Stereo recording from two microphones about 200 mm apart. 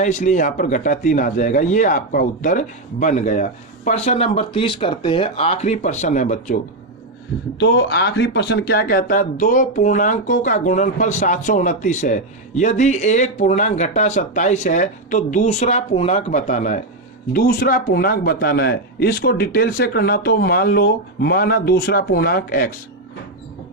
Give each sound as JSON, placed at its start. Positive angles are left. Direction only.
{"t": 0.0, "sound": "speech", "side_deg": 35}
{"t": 7.6, "sound": "speech", "side_deg": 60}